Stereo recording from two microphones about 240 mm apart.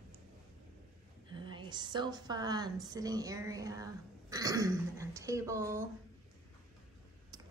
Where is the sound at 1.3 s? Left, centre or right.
Centre.